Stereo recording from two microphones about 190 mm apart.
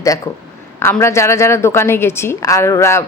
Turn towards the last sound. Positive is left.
turn(degrees=15)  # may be behind; listen again after turning